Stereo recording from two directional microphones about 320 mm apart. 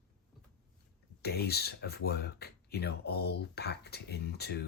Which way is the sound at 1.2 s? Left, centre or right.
Left.